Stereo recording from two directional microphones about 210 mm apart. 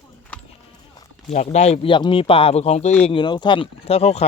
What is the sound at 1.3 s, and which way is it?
A man's voice, 35° left (ahead or behind).